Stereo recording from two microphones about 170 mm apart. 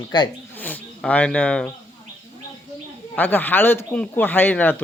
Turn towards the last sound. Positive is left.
turn(degrees=10)  # may be behind; listen again after turning